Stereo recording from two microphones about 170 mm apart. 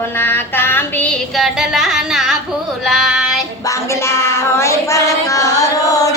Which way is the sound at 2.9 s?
Centre (ahead or behind).